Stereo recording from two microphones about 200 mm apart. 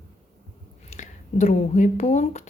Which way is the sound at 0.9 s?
35° left (ahead or behind).